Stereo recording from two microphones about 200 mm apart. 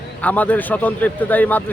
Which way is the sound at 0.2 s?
10° left (ahead or behind).